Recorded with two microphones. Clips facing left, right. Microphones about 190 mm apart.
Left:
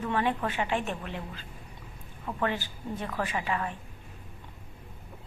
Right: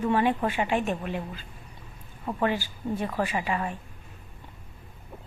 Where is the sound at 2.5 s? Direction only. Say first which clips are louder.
Right 5 dB; 10° right (ahead or behind).